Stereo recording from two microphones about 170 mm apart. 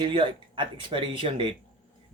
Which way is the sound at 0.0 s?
30° right (ahead or behind).